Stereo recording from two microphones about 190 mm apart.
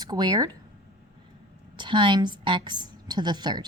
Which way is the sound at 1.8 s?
25° right (ahead or behind).